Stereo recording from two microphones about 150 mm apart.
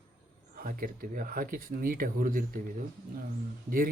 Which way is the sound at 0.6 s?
70° right (ahead or behind).